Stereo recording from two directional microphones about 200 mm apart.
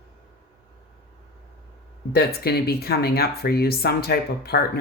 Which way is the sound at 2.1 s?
50° left (ahead or behind).